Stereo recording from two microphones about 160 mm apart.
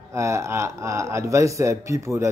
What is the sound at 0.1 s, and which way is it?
Speech, 20° right (ahead or behind).